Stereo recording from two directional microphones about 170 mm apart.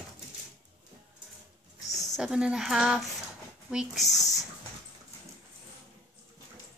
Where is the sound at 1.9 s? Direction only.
45° left (ahead or behind).